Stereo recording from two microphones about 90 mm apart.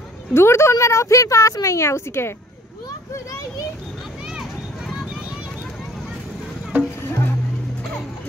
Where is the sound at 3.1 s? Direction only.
40° left (ahead or behind).